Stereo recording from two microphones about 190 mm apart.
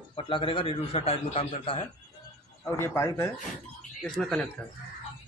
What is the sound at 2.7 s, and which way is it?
Speech, 15° left (ahead or behind).